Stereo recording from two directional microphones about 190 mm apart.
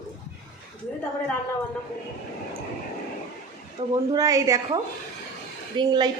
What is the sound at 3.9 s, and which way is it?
A woman's voice, 20° right (ahead or behind).